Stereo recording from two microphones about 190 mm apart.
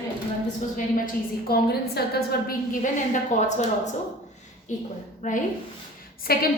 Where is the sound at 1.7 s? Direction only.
55° left (ahead or behind); by 3.9 s 40° left (ahead or behind).